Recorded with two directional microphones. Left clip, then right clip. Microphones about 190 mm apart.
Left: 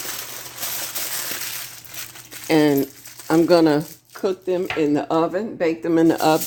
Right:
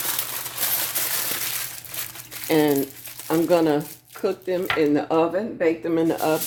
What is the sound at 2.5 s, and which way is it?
Speech, 45° left (ahead or behind).